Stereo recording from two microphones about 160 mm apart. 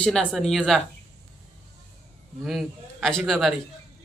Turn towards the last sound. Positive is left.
turn(degrees=0)  # may be behind; listen again after turning